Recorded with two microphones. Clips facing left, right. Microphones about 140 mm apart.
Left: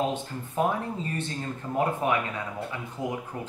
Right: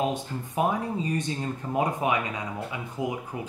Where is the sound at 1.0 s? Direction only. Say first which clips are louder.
Right 3 dB; 15° right (ahead or behind).